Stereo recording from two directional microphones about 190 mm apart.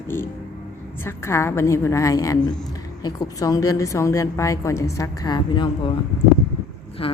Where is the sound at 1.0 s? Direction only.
15° left (ahead or behind).